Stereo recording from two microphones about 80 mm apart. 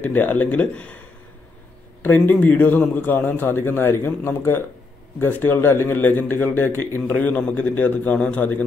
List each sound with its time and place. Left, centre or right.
0.0 s speech: left
2.0 s speech: left